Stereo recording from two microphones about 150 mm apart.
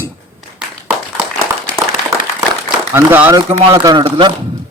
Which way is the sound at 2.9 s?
15° right (ahead or behind).